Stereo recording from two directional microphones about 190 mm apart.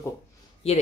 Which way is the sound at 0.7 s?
30° left (ahead or behind).